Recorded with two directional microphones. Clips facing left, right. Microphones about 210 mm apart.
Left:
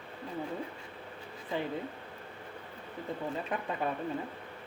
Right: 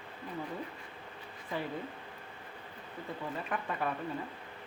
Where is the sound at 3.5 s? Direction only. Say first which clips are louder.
Right 1 dB; 20° left (ahead or behind).